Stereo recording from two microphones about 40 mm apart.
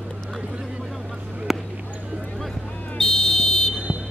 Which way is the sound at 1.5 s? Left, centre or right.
Centre.